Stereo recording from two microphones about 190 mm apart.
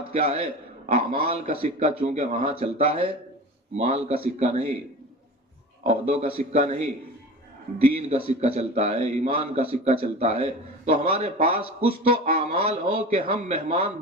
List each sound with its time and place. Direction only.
0.1 s speech: 35° right (ahead or behind)
1.5 s speech: 35° right (ahead or behind)
5.8 s speech: 35° right (ahead or behind)
7.8 s speech: 35° right (ahead or behind)